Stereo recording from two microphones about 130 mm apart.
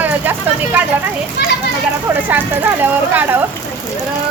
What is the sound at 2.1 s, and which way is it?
Speech, 15° right (ahead or behind).